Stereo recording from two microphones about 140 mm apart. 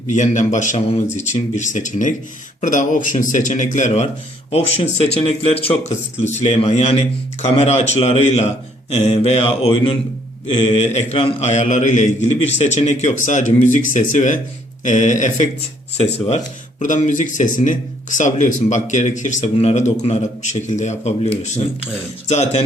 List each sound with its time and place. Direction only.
0.1 s a man's voice: 60° left (ahead or behind)
16.0 s a man's voice: 50° left (ahead or behind)
16.8 s a man's voice: 60° left (ahead or behind)
22.3 s a man's voice: 50° left (ahead or behind)